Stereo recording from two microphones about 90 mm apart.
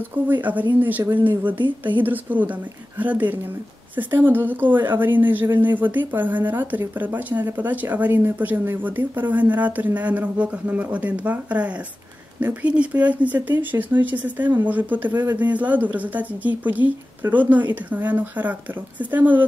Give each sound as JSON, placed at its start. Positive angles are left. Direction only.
{"t": 0.3, "sound": "a woman's voice", "side_deg": -20}